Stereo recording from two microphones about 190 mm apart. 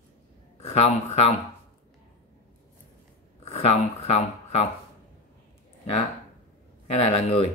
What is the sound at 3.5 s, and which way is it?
Speech, 35° left (ahead or behind).